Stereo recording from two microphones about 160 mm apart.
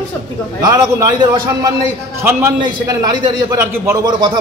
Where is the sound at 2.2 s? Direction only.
15° right (ahead or behind).